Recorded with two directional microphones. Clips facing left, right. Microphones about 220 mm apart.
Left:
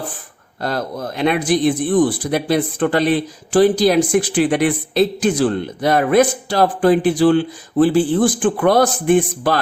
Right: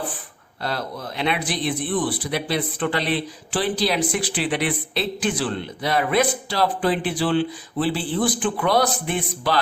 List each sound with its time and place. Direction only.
0.6 s speech: 45° left (ahead or behind)